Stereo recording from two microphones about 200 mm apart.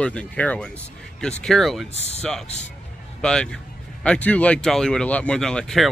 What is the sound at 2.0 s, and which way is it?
Speech, 35° left (ahead or behind).